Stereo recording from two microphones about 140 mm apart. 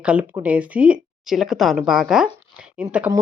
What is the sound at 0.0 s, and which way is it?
A woman's voice, 10° right (ahead or behind).